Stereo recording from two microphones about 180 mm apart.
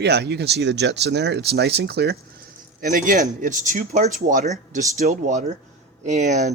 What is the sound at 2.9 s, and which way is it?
Speech, 50° right (ahead or behind).